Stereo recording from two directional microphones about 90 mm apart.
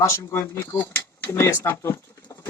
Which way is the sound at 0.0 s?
30° left (ahead or behind).